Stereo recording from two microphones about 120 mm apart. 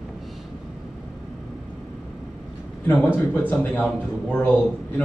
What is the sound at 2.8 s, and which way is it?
A man's voice, 15° left (ahead or behind).